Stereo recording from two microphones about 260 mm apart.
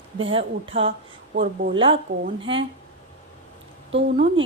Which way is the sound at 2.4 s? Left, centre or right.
Centre.